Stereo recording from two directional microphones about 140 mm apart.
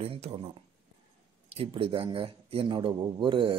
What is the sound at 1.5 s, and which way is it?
Speech, 40° right (ahead or behind).